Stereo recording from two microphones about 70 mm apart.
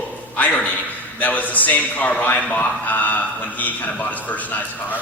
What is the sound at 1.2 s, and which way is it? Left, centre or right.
A man's voice, left.